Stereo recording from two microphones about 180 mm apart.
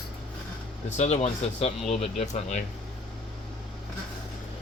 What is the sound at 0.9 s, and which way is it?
Speech, 40° left (ahead or behind).